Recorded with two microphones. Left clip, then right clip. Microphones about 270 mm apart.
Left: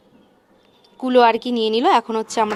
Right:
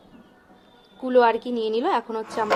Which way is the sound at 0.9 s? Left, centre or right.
Left.